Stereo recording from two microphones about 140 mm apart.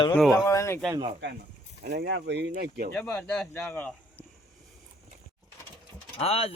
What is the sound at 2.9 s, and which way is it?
Speech, 10° left (ahead or behind).